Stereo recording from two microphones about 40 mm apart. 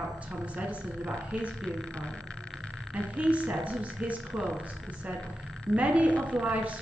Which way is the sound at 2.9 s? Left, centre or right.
Right.